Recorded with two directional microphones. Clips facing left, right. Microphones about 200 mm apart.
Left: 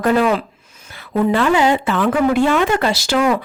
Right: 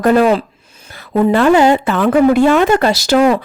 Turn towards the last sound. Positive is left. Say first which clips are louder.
# right 5 dB
turn(degrees=-40)  # may be behind; listen again after turning